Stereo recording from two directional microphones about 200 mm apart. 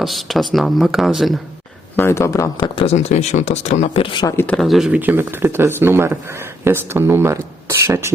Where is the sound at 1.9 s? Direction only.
10° left (ahead or behind).